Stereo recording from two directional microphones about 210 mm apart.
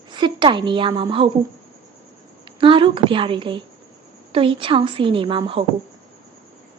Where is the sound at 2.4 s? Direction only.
25° right (ahead or behind).